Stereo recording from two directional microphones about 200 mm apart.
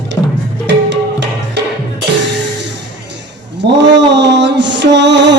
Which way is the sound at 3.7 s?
60° right (ahead or behind).